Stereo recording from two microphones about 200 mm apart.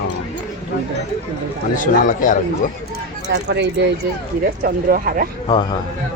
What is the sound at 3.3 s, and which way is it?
Speech, 60° right (ahead or behind).